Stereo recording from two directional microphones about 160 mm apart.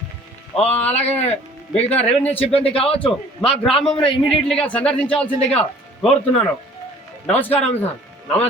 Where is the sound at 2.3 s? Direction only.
35° left (ahead or behind).